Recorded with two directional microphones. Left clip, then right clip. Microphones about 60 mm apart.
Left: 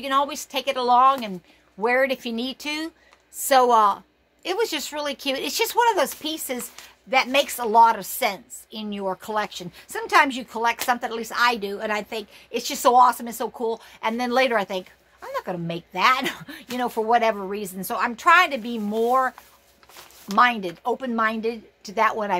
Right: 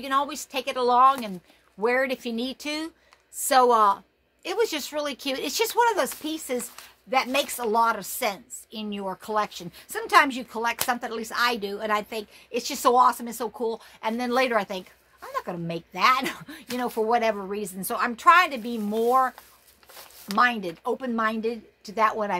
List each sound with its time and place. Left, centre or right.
0.0 s a woman's voice: left
9.7 s speech: centre
10.2 s a woman's voice: left
12.4 s a woman's voice: left
17.9 s speech: centre
18.2 s a woman's voice: left
18.9 s a woman's voice: left
20.3 s a woman's voice: left
21.8 s a woman's voice: left